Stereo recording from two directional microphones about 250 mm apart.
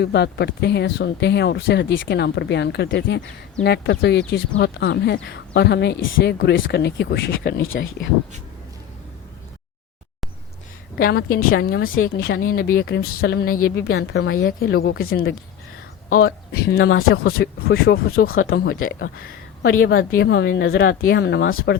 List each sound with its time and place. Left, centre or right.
0.0 s speech: left
10.9 s speech: left
14.4 s speech: left
17.1 s speech: left
19.7 s speech: left